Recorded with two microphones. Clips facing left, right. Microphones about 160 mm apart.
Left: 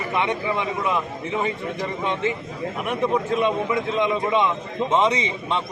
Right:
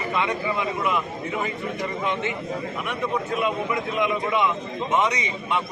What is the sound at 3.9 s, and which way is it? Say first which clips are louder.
A man's voice: left 2 dB; 25° left (ahead or behind).